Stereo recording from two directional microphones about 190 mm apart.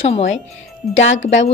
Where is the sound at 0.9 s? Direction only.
80° left.